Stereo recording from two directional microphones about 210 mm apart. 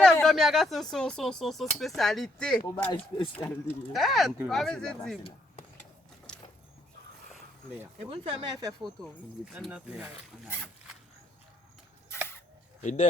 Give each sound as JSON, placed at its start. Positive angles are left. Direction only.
{"t": 0.0, "sound": "speech", "side_deg": 5}
{"t": 7.9, "sound": "speech", "side_deg": -25}
{"t": 9.5, "sound": "speech", "side_deg": -5}
{"t": 12.8, "sound": "speech", "side_deg": 35}